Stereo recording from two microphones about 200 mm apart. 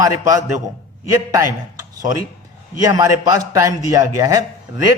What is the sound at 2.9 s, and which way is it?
A man's voice, 15° right (ahead or behind).